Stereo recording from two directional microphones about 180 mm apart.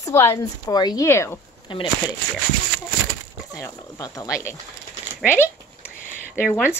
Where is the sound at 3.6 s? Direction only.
20° left (ahead or behind).